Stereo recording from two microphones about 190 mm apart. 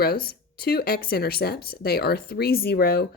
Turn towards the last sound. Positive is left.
turn(degrees=55)  # may be behind; listen again after turning